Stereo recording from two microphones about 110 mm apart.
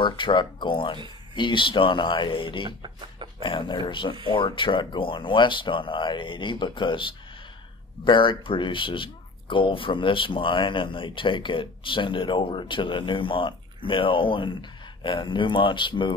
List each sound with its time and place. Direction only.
0.0 s speech: 50° left (ahead or behind)